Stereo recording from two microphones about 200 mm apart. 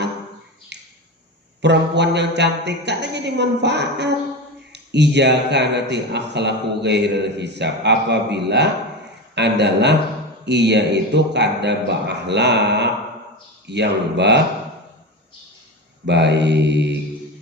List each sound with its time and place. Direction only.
0.7 s finger snapping: 60° right (ahead or behind)
1.6 s a man's voice: 60° right (ahead or behind)
16.0 s a man's voice: 60° right (ahead or behind)